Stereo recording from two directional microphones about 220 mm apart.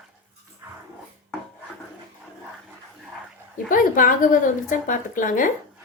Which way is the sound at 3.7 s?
40° left (ahead or behind).